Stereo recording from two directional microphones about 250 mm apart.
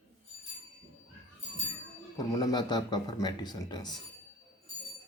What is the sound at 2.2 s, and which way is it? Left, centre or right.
A man's voice, centre.